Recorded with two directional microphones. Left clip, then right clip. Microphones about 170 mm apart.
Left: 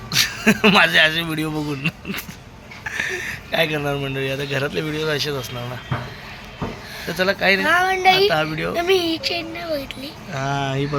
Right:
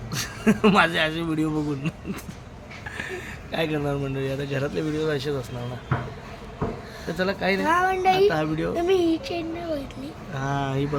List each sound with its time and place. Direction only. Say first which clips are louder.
0.1 s speech: left 8 dB; 5° right (ahead or behind)
2.9 s a sound: left 10 dB; 10° right (ahead or behind)
4.5 s speech: left 2 dB; centre (ahead or behind)
7.1 s speech: left 7 dB; 10° right (ahead or behind)
7.6 s speech: left 5 dB; 40° right (ahead or behind)
8.3 s speech: left 4 dB; 10° right (ahead or behind)
8.7 s speech: left 4 dB; 25° right (ahead or behind)
9.0 s speech: left 2 dB; 5° right (ahead or behind)
10.3 s speech: left 4 dB; 10° left (ahead or behind)